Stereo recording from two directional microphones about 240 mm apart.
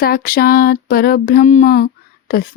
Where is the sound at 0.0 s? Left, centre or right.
Left.